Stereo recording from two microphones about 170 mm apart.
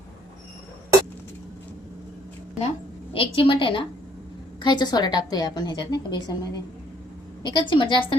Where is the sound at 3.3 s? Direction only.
30° left (ahead or behind).